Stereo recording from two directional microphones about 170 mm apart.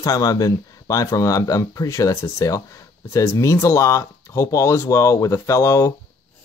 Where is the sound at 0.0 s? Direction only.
20° left (ahead or behind).